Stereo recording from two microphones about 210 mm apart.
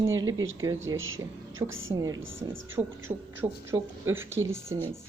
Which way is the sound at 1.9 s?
15° right (ahead or behind).